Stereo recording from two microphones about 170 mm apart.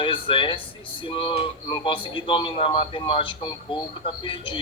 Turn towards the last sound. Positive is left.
turn(degrees=30)  # may be behind; listen again after turning